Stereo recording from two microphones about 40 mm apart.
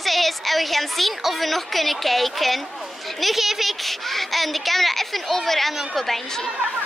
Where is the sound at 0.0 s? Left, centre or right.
Centre.